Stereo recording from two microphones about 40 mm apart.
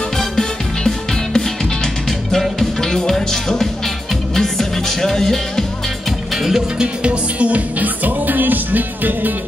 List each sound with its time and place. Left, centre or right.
0.2 s music: centre
6.3 s music: centre
6.8 s music: right